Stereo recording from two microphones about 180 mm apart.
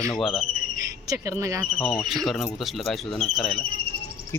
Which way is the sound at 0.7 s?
20° right (ahead or behind).